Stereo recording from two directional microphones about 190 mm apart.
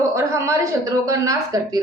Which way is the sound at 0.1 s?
15° right (ahead or behind).